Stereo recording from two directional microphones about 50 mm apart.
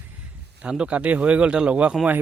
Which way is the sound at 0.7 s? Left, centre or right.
Right.